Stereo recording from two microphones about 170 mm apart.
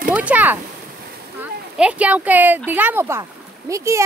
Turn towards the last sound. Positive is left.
turn(degrees=-20)  # may be behind; listen again after turning